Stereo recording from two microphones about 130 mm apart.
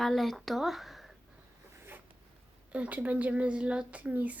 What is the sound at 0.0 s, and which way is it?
A woman's voice, centre (ahead or behind).